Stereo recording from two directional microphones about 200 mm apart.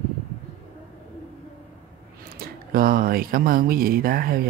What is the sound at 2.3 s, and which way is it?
Speech, 45° right (ahead or behind).